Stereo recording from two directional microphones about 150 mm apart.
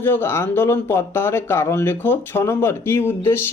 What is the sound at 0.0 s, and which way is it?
Speech, 15° left (ahead or behind).